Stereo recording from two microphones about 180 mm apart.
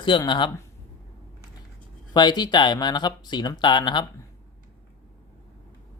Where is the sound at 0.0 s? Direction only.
25° left (ahead or behind).